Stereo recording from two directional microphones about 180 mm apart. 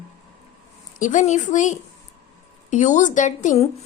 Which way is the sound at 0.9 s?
45° left (ahead or behind).